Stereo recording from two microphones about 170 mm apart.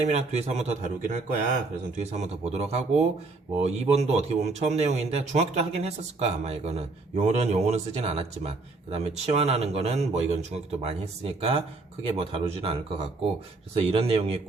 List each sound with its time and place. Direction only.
0.0 s a man's voice: 40° right (ahead or behind)